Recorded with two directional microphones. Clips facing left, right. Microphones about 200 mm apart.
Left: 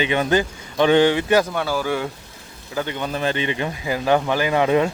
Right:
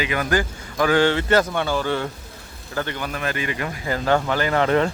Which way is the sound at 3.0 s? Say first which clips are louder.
Left 4 dB; 30° left (ahead or behind).